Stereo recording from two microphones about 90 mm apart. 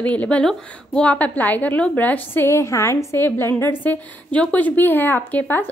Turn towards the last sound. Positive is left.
turn(degrees=20)  # may be behind; listen again after turning